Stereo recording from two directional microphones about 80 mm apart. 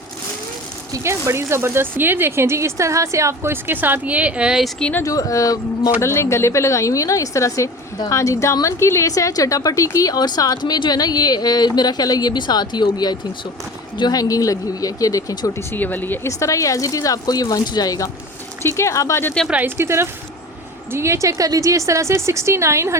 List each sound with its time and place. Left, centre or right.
0.9 s speech: right; by 4.6 s centre
4.8 s speech: centre
5.0 s a woman's voice: left
14.1 s speech: left
15.7 s speech: left
16.2 s speech: left
18.6 s a woman's voice: left
19.6 s speech: right